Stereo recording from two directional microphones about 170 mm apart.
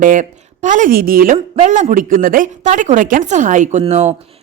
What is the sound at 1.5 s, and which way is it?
A woman's voice, 40° right (ahead or behind).